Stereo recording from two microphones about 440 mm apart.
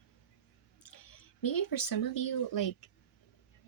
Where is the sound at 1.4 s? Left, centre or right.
Left.